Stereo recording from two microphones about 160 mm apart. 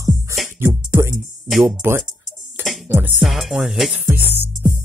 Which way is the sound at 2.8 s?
10° right (ahead or behind).